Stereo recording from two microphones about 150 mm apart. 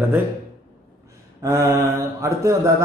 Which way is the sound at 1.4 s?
20° right (ahead or behind).